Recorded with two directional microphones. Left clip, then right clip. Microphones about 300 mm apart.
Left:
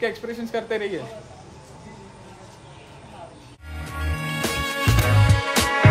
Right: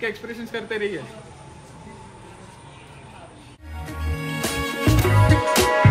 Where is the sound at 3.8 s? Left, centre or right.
Centre.